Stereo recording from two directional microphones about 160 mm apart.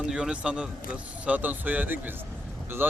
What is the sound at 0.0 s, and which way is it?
A man's voice, 5° right (ahead or behind).